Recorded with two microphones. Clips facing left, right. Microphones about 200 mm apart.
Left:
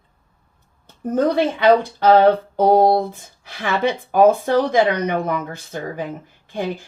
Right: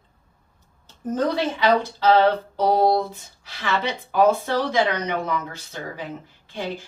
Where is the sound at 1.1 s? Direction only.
55° left (ahead or behind).